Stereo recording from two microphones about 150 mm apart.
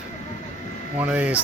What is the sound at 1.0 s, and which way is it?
Speech, 10° right (ahead or behind).